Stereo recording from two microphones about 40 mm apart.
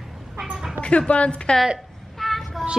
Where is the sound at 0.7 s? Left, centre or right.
Left.